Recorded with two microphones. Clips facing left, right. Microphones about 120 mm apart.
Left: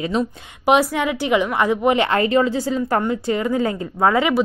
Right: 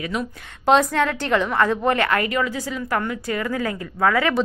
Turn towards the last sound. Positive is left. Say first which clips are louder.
# left 2 dB
turn(degrees=20)  # may be behind; listen again after turning